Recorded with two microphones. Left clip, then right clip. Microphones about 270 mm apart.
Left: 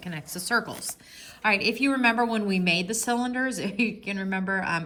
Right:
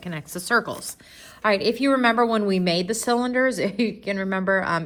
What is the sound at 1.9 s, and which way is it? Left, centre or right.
Speech, right.